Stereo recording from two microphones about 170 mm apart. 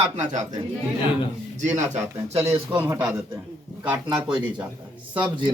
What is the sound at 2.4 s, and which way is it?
Speech, 15° right (ahead or behind).